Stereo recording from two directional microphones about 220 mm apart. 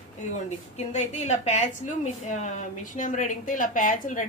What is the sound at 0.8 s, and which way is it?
A woman's voice, 30° left (ahead or behind).